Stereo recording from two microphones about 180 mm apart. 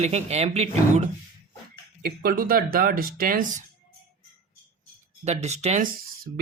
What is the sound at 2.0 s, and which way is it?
Speech, 55° right (ahead or behind).